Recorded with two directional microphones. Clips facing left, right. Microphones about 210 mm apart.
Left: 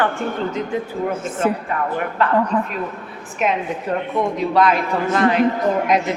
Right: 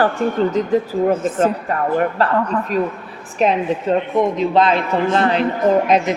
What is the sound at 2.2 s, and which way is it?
Speech, 35° right (ahead or behind).